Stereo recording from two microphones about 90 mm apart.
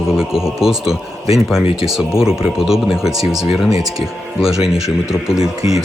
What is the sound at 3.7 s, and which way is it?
Speech, 40° right (ahead or behind).